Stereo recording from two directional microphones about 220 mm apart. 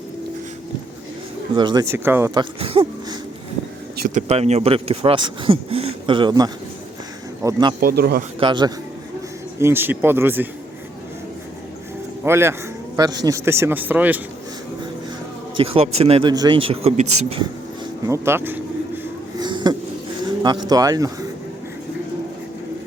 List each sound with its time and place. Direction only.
1.5 s speech: 20° right (ahead or behind)
7.8 s a man's voice: 45° right (ahead or behind)
8.4 s speech: 20° right (ahead or behind)
9.6 s speech: 10° right (ahead or behind)
12.2 s speech: 10° right (ahead or behind)
15.5 s speech: 25° right (ahead or behind)
18.0 s speech: 10° right (ahead or behind)
19.4 s a sound: 20° right (ahead or behind)
20.2 s speech: 20° right (ahead or behind)